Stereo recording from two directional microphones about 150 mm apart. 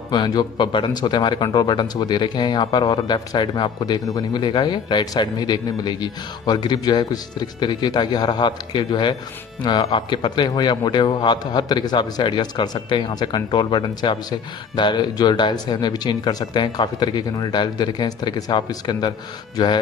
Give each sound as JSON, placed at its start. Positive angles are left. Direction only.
{"t": 0.1, "sound": "speech", "side_deg": 30}